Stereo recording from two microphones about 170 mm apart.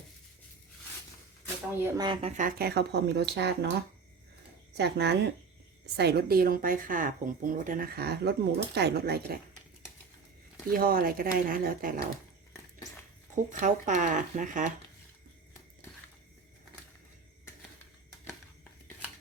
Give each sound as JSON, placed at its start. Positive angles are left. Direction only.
{"t": 1.8, "sound": "speech", "side_deg": -15}
{"t": 2.3, "sound": "a woman's voice", "side_deg": -50}
{"t": 10.7, "sound": "a woman's voice", "side_deg": -60}
{"t": 13.3, "sound": "speech", "side_deg": -45}